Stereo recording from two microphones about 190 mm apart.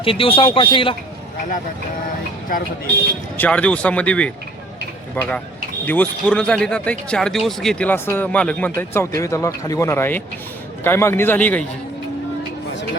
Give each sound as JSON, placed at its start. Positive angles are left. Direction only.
{"t": 0.0, "sound": "a man's voice", "side_deg": 30}
{"t": 2.5, "sound": "speech", "side_deg": 50}
{"t": 3.3, "sound": "speech", "side_deg": 10}